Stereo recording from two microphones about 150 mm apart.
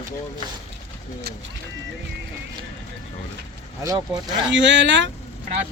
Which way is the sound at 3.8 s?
25° right (ahead or behind).